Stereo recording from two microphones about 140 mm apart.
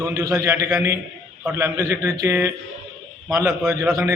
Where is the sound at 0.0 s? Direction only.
25° right (ahead or behind).